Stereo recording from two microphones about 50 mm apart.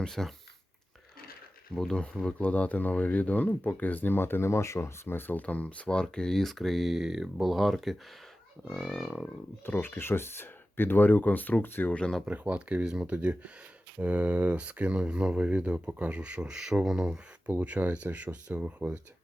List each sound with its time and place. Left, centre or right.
0.0 s speech: centre
1.7 s speech: centre
2.4 s speech: left
5.0 s speech: left
5.4 s speech: left; by 7.9 s centre
9.0 s speech: centre
9.7 s speech: left
11.9 s speech: left
12.2 s speech: right